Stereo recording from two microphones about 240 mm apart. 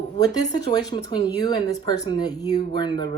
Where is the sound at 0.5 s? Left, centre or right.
Centre.